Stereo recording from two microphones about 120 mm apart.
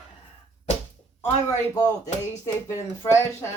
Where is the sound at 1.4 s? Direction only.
25° left (ahead or behind).